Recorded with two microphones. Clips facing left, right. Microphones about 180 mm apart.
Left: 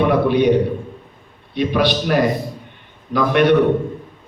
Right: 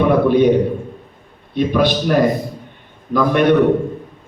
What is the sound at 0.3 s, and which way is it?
Speech, 45° right (ahead or behind).